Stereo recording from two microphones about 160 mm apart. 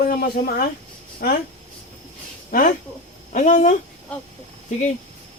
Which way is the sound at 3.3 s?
50° left (ahead or behind).